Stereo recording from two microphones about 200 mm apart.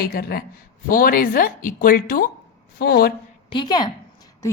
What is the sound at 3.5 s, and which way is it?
Speech, 20° left (ahead or behind).